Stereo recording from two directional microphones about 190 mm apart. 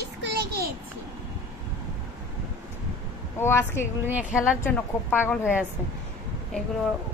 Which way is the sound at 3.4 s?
10° left (ahead or behind).